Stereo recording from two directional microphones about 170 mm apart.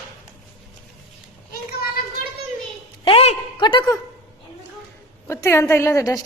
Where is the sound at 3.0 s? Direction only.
35° left (ahead or behind).